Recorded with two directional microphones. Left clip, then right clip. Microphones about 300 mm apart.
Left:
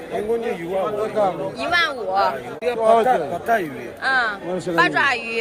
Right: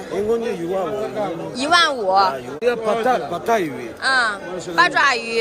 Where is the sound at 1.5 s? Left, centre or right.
Centre.